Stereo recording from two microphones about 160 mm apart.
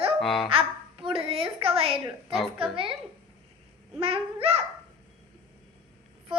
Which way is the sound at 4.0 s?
35° right (ahead or behind).